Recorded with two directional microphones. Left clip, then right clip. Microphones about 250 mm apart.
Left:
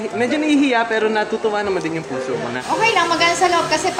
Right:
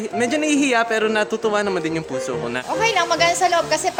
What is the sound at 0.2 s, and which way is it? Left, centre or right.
A woman's voice, right.